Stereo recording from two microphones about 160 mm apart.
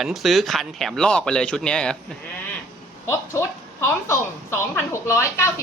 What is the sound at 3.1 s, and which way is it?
A woman's voice, 20° left (ahead or behind).